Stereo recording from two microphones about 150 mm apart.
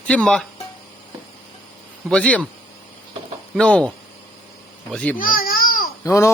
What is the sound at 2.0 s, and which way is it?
Speech, 10° left (ahead or behind).